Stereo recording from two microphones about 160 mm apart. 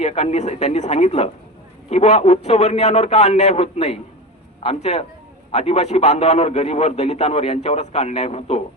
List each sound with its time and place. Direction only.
0.0 s a man's voice: 45° left (ahead or behind)